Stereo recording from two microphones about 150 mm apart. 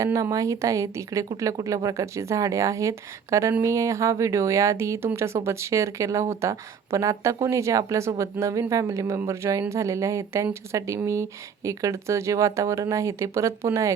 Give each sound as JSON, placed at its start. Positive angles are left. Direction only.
{"t": 0.0, "sound": "speech", "side_deg": -20}